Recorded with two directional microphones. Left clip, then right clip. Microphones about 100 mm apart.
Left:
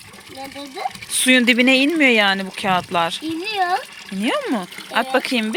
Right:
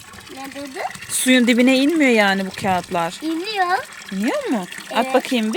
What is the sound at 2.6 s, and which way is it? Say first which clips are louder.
Speech: left 1 dB; 10° right (ahead or behind).